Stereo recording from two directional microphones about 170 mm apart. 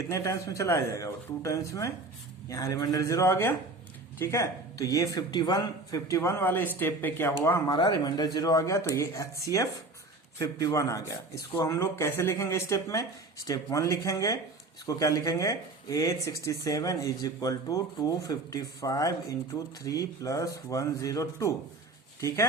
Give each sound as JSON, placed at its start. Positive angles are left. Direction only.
{"t": 0.1, "sound": "speech", "side_deg": 20}
{"t": 7.8, "sound": "speech", "side_deg": 25}